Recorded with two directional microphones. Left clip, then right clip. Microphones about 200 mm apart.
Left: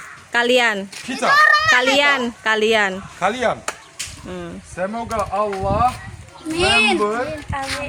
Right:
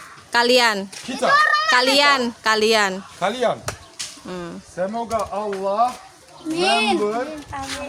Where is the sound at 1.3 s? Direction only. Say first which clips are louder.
Left 4 dB; 55° left (ahead or behind).